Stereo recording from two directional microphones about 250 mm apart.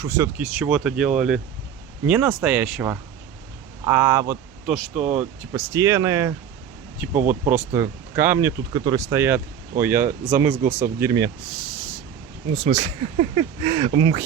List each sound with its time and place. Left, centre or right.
0.0 s speech: centre